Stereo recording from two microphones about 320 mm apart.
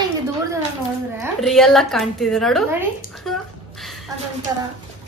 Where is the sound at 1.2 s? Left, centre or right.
Centre.